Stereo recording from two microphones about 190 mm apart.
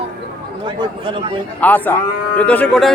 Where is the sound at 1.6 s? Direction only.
10° left (ahead or behind).